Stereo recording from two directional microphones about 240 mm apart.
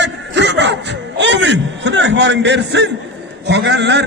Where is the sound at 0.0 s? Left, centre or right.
Right.